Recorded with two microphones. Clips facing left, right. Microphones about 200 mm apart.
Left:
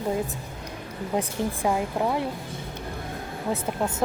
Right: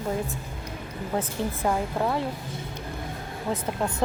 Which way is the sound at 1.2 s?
10° left (ahead or behind).